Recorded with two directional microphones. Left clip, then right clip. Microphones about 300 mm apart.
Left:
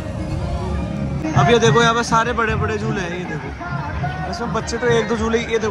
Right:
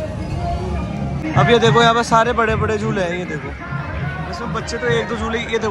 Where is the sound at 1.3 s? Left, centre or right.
Centre.